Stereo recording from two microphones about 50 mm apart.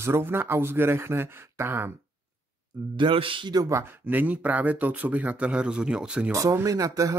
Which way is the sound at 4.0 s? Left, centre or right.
Right.